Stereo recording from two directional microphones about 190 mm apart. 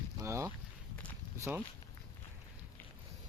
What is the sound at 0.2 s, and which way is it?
Boat, 15° right (ahead or behind).